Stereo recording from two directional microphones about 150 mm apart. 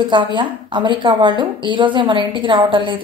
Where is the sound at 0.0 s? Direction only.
30° right (ahead or behind).